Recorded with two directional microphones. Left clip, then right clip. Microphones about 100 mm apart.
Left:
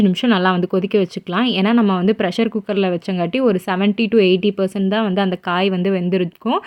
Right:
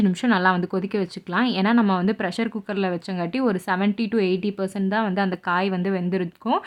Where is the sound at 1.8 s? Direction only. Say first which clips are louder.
Left 6 dB; 20° left (ahead or behind).